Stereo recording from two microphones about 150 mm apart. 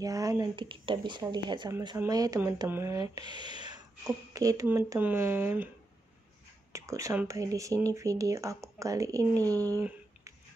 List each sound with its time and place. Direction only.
0.0 s speech: 25° right (ahead or behind)
6.7 s speech: 20° right (ahead or behind)
9.4 s speech: 10° left (ahead or behind)